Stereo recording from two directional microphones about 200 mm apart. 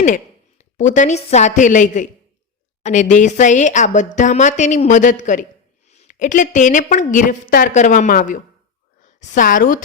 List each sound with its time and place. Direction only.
0.6 s a woman's voice: 35° left (ahead or behind)